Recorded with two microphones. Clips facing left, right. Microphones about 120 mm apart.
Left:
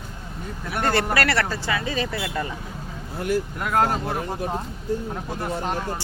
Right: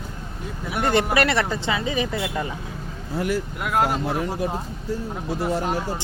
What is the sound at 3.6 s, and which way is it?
Speech, 5° right (ahead or behind).